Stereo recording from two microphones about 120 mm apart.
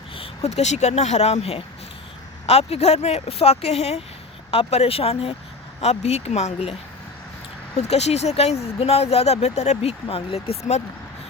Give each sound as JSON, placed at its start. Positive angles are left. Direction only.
{"t": 0.2, "sound": "speech", "side_deg": 60}
{"t": 7.8, "sound": "speech", "side_deg": 65}